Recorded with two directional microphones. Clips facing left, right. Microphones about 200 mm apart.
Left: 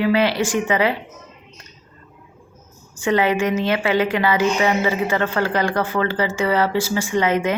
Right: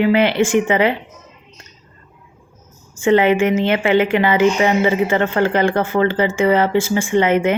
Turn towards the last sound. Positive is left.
turn(degrees=-25)  # may be behind; listen again after turning